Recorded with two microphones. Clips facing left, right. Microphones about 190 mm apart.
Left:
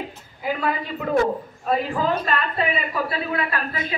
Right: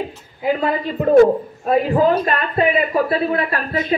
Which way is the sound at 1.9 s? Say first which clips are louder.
Right 7 dB; 45° right (ahead or behind).